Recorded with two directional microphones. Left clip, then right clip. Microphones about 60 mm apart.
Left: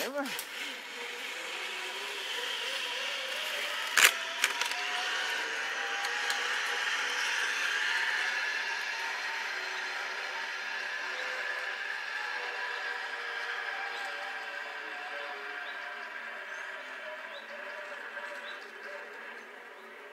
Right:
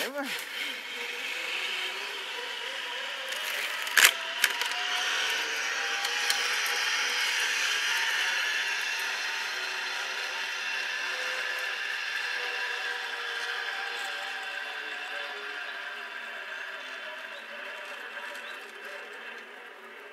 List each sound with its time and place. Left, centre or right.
0.0 s a sound: right
1.4 s blender: right
3.9 s camera: centre
4.9 s vehicle: right